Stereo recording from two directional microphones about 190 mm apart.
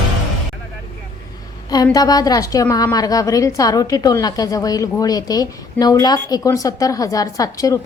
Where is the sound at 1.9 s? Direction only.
20° left (ahead or behind).